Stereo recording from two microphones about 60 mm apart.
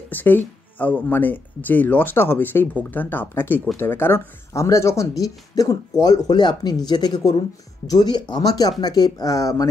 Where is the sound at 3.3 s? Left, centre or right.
Left.